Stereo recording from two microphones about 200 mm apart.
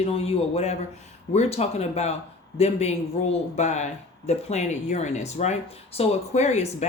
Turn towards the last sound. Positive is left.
turn(degrees=35)  # may be behind; listen again after turning